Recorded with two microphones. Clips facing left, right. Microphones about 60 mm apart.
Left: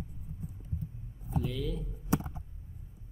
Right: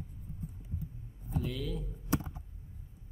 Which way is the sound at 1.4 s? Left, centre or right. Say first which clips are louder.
Left 1 dB; centre.